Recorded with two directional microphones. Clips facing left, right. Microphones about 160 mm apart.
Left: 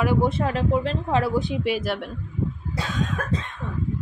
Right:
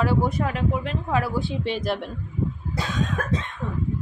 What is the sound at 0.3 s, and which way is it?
Speech, 30° left (ahead or behind).